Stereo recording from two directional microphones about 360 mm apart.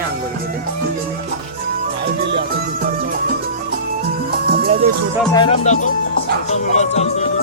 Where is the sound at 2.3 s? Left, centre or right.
Right.